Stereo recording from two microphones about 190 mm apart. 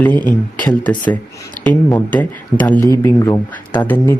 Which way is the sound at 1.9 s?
10° left (ahead or behind).